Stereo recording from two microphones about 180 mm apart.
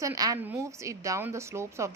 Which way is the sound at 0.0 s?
20° right (ahead or behind).